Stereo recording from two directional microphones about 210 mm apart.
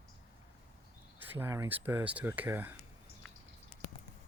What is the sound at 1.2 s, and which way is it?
Speech, 10° right (ahead or behind).